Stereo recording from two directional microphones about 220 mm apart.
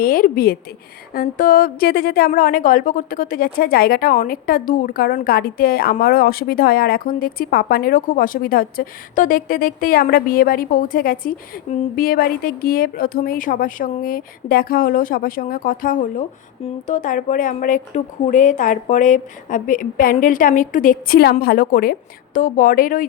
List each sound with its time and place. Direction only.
0.0 s a woman's voice: 40° left (ahead or behind)